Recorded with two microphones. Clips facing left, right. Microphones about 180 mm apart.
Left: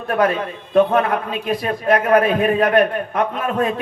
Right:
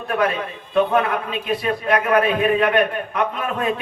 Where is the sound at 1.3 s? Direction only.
40° left (ahead or behind).